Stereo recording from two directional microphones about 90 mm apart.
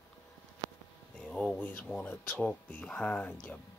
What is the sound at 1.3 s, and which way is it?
Speech, 10° left (ahead or behind).